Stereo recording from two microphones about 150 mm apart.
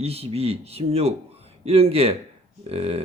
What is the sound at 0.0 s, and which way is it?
Speech, 40° right (ahead or behind).